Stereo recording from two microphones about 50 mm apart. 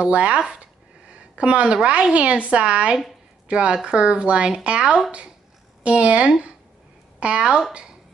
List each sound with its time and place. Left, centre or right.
0.0 s a woman's voice: right